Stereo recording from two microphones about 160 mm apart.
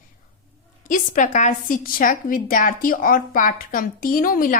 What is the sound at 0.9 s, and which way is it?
A woman's voice, 55° left (ahead or behind).